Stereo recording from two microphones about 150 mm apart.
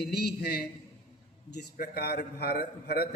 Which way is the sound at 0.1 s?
90° left.